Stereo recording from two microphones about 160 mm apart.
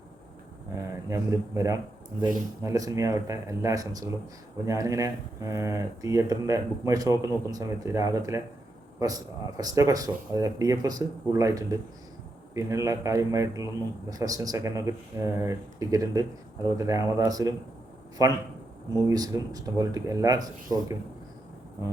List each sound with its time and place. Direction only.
0.8 s speech: 20° right (ahead or behind)